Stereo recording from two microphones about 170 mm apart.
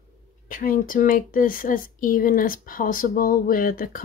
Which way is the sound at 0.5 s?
55° left (ahead or behind).